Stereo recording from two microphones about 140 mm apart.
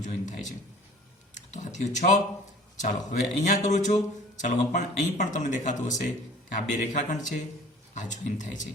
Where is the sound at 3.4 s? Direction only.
60° left (ahead or behind).